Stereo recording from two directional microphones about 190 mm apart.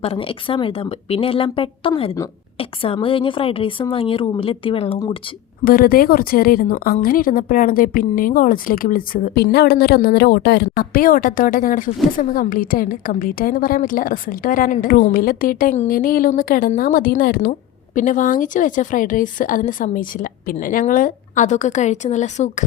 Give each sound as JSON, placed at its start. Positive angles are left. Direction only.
{"t": 0.0, "sound": "speech", "side_deg": 30}
{"t": 5.6, "sound": "a woman's voice", "side_deg": 50}